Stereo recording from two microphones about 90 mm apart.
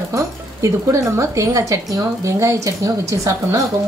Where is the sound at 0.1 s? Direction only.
35° right (ahead or behind).